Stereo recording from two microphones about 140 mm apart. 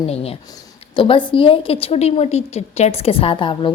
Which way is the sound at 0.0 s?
45° left (ahead or behind).